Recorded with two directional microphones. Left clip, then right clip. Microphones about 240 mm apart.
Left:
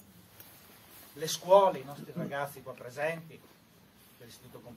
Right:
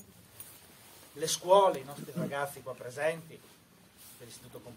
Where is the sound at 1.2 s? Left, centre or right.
Right.